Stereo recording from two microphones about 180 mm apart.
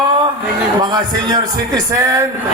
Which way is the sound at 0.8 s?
25° right (ahead or behind).